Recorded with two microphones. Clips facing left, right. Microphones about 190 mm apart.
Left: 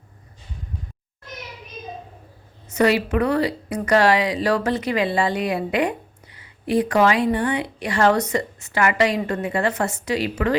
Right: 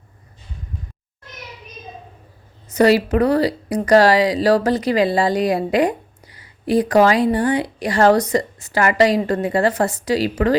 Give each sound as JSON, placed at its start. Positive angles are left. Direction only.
{"t": 2.7, "sound": "speech", "side_deg": -35}